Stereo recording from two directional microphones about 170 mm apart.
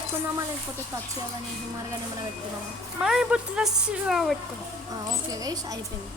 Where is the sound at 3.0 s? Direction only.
5° right (ahead or behind).